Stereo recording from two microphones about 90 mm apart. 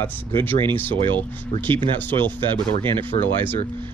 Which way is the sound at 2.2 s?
65° right (ahead or behind).